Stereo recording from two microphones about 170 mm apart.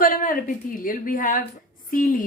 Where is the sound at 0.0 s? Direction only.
55° left (ahead or behind).